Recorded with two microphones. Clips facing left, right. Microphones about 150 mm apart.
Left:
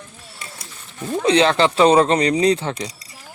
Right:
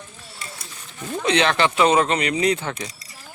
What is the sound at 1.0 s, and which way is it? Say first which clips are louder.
Speech: left 4 dB; 30° left (ahead or behind).